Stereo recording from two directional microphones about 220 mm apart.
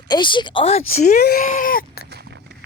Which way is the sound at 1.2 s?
45° left (ahead or behind).